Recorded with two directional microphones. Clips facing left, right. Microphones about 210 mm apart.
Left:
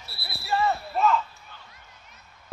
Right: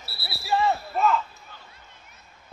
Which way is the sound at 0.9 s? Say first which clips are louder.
Left 2 dB; centre (ahead or behind).